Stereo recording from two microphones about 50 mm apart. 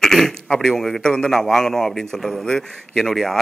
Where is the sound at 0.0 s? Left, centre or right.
Centre.